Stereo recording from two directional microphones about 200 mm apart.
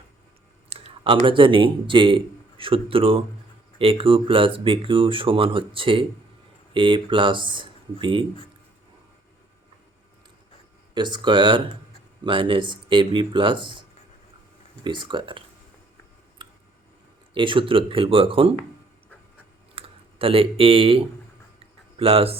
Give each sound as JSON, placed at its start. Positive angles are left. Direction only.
{"t": 0.7, "sound": "speech", "side_deg": -30}
{"t": 10.9, "sound": "speech", "side_deg": -20}
{"t": 14.8, "sound": "speech", "side_deg": -25}
{"t": 16.4, "sound": "a sound", "side_deg": -25}
{"t": 17.3, "sound": "speech", "side_deg": -25}
{"t": 19.7, "sound": "speech", "side_deg": -30}
{"t": 21.6, "sound": "a sound", "side_deg": -30}